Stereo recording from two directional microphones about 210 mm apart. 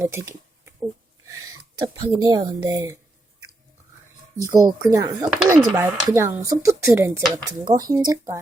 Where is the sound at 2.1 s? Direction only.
20° right (ahead or behind).